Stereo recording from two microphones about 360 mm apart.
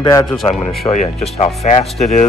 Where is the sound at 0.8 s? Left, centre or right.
Centre.